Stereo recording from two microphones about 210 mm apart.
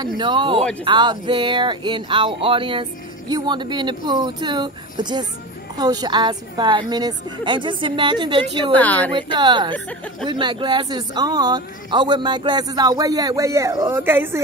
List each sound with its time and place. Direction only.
0.2 s speech: 25° right (ahead or behind)
8.7 s speech: 10° left (ahead or behind)
9.1 s speech: 20° right (ahead or behind)